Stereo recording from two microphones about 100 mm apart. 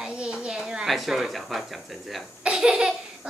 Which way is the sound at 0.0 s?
10° right (ahead or behind).